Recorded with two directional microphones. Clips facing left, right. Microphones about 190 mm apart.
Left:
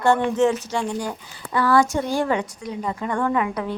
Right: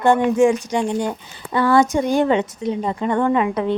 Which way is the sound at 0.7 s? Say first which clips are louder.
Right 5 dB; 20° right (ahead or behind).